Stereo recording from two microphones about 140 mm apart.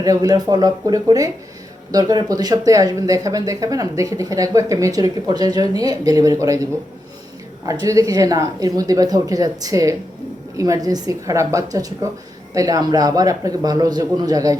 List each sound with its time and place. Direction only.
0.0 s speech: 25° right (ahead or behind)